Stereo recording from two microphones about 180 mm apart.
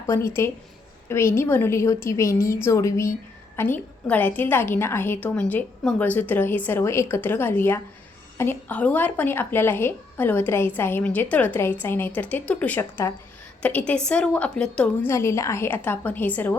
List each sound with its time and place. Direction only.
0.1 s a woman's voice: 15° left (ahead or behind)
15.1 s a woman's voice: 15° left (ahead or behind)